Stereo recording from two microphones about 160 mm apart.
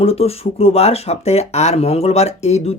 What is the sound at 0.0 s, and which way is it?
Speech, 40° left (ahead or behind).